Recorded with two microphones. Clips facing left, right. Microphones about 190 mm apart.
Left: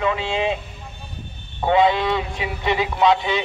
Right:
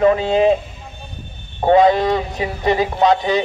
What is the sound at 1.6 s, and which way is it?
Speech, 45° right (ahead or behind).